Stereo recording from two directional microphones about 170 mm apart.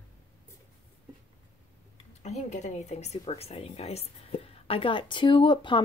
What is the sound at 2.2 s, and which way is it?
Speech, 45° left (ahead or behind).